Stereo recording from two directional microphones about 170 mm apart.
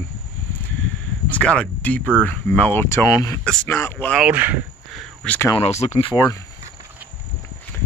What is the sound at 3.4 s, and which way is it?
Speech, 5° left (ahead or behind).